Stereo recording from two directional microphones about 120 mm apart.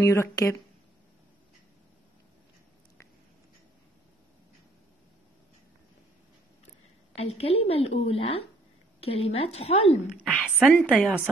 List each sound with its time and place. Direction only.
0.0 s speech: 25° left (ahead or behind)
7.2 s a woman's voice: 55° left (ahead or behind)
10.3 s a woman's voice: 10° right (ahead or behind)